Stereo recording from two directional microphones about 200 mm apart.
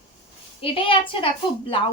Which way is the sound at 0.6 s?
25° left (ahead or behind).